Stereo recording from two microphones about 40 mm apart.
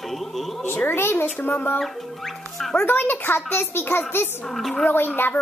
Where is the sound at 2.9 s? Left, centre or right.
Left.